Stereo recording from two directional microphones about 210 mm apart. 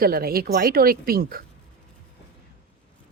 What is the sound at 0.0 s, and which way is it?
Speech, 45° right (ahead or behind).